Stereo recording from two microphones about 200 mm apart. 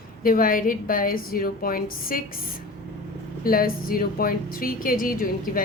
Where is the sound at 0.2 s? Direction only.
45° left (ahead or behind).